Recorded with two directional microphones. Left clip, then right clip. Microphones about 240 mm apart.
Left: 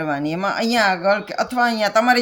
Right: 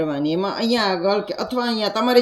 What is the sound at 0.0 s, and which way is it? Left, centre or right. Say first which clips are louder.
Speech: even; left.